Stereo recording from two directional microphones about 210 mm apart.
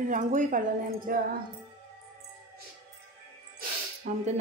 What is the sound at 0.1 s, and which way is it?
A woman's voice, 40° right (ahead or behind).